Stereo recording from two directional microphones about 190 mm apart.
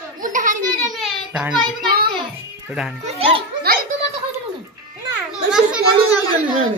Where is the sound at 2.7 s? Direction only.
5° right (ahead or behind).